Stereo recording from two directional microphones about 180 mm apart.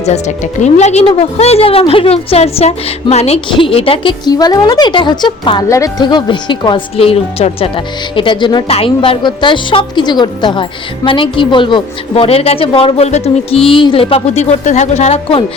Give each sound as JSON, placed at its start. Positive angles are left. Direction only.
{"t": 0.6, "sound": "a woman's voice", "side_deg": 40}